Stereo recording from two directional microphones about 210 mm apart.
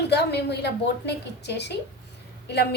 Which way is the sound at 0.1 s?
50° left (ahead or behind).